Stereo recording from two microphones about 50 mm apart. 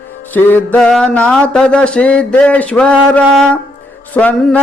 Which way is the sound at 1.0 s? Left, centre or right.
Left.